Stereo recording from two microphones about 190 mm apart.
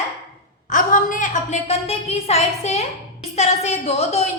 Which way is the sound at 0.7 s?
45° left (ahead or behind).